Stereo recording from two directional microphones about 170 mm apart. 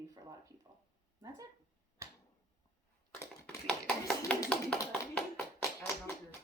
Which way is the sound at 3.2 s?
5° left (ahead or behind).